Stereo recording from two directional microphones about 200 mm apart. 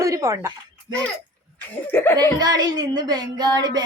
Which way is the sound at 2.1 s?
20° right (ahead or behind).